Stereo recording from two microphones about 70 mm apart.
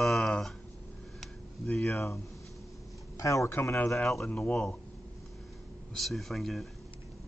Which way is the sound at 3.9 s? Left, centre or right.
Centre.